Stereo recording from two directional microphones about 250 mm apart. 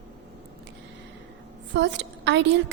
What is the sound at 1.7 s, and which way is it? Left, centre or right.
Speech, right.